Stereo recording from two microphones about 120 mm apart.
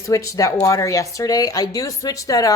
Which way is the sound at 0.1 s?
25° left (ahead or behind).